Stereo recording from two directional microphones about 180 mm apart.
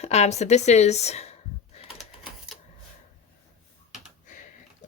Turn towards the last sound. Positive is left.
turn(degrees=45)  # may be behind; listen again after turning